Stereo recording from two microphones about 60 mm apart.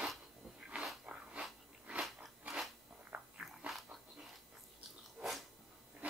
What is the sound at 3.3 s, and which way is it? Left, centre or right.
Biting, centre.